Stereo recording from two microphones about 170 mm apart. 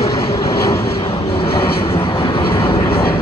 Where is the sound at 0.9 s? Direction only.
35° left (ahead or behind).